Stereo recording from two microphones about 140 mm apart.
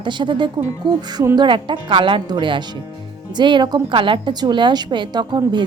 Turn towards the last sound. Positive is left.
turn(degrees=-30)  # may be behind; listen again after turning